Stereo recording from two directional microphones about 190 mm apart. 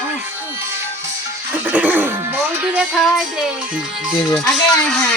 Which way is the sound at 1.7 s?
10° right (ahead or behind).